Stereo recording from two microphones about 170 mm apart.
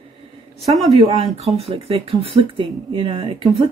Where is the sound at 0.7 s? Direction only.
Centre (ahead or behind).